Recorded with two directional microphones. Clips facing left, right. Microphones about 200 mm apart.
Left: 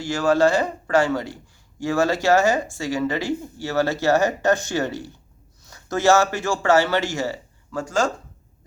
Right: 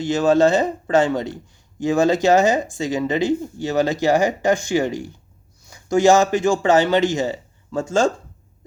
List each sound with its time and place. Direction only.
0.0 s a man's voice: 20° right (ahead or behind)